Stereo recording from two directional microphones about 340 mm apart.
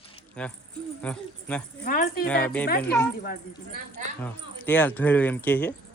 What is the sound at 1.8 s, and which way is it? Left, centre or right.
Speech, left.